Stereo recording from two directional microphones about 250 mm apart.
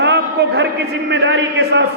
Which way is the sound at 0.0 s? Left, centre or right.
Right.